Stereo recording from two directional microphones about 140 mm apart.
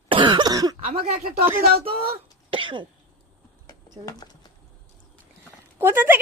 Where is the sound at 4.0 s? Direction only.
25° left (ahead or behind).